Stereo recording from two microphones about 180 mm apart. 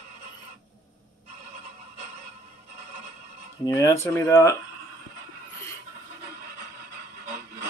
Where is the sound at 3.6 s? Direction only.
15° left (ahead or behind).